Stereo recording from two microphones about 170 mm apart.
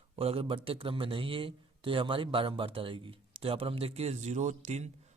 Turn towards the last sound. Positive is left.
turn(degrees=-40)  # may be behind; listen again after turning